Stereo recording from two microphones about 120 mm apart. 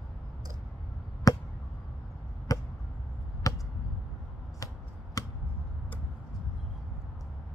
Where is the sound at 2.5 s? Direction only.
30° left (ahead or behind).